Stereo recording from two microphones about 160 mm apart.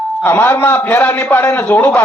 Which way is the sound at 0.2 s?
10° left (ahead or behind).